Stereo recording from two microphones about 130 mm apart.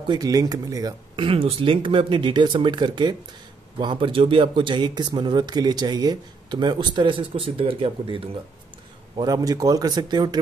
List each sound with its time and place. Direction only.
0.1 s speech: 30° right (ahead or behind); by 8.2 s 45° right (ahead or behind)
9.1 s speech: 30° right (ahead or behind)